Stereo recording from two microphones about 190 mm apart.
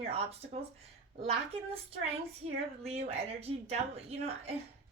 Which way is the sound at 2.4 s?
35° right (ahead or behind).